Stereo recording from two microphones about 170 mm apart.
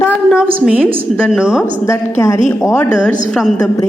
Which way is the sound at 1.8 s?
15° left (ahead or behind).